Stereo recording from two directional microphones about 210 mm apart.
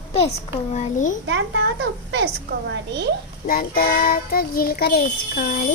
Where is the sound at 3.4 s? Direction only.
45° left (ahead or behind).